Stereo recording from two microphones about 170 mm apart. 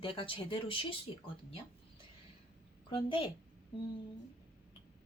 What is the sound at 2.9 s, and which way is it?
Speech, 30° left (ahead or behind).